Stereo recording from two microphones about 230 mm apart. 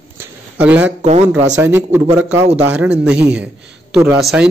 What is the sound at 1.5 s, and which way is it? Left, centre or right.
A man's voice, centre.